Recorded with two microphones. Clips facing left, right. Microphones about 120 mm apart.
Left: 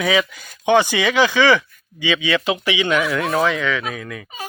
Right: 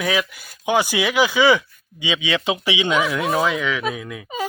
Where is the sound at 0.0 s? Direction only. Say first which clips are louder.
Left 3 dB; 5° right (ahead or behind).